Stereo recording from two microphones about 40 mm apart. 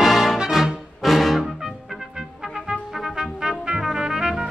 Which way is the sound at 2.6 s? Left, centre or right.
Right.